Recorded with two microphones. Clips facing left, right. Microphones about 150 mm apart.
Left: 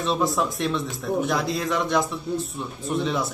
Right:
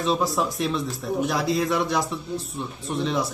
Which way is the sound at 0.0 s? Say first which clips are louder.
Even; centre (ahead or behind).